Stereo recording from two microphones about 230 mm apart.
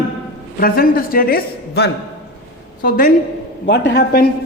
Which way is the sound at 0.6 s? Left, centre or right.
Left.